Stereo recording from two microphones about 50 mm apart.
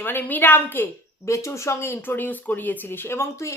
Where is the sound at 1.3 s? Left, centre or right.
Left.